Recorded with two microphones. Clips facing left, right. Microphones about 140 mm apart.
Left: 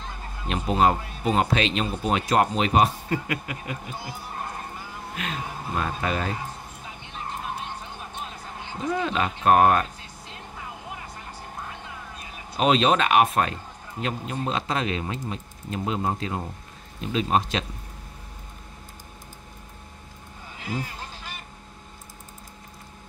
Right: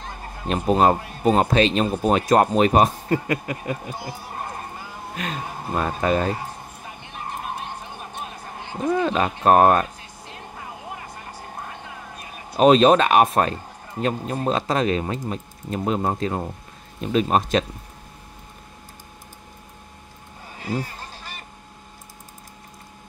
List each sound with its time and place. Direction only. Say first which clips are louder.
0.4 s speech: right 4 dB; 40° right (ahead or behind)
3.9 s a sound: right 3 dB; 15° right (ahead or behind)
5.8 s speech: right 6 dB; 45° right (ahead or behind)
7.6 s a sound: right 2 dB; 15° right (ahead or behind)
8.7 s speech: right 5 dB; 55° right (ahead or behind); by 9.8 s 40° right (ahead or behind)
12.5 s speech: right 6 dB; 40° right (ahead or behind)